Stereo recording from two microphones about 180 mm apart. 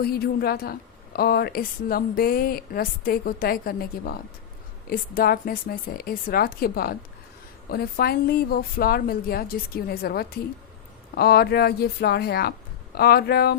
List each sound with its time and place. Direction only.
0.0 s a woman's voice: 60° left (ahead or behind)